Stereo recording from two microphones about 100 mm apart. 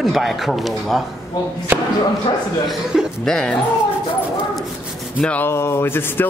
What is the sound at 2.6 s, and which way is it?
Speech, centre (ahead or behind).